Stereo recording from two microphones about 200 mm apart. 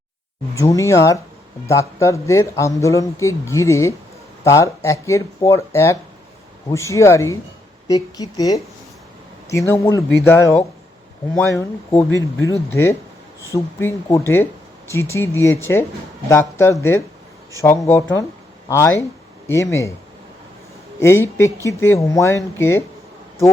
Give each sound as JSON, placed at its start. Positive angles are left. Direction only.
{"t": 0.5, "sound": "speech", "side_deg": 15}
{"t": 21.0, "sound": "speech", "side_deg": 10}